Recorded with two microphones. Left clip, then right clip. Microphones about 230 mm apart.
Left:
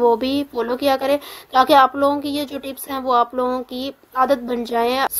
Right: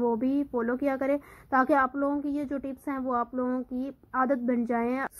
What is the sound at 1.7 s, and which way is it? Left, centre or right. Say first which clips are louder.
Speech: left 12 dB; left.